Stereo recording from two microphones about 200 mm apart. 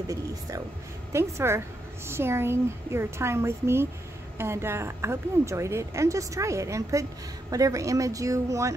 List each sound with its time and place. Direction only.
1.1 s a woman's voice: 15° right (ahead or behind)